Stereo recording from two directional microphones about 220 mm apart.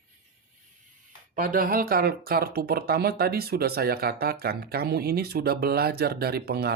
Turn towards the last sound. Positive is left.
turn(degrees=-45)  # may be behind; listen again after turning